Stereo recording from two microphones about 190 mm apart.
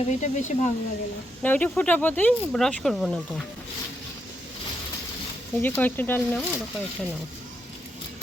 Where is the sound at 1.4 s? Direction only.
10° left (ahead or behind).